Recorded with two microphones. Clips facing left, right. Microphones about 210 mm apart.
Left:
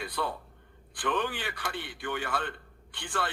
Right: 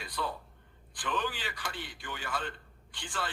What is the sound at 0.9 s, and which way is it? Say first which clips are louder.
A man's voice: left 4 dB; 60° left (ahead or behind).